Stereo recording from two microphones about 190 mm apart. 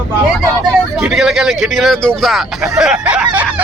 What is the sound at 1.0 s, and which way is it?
Speech, centre (ahead or behind).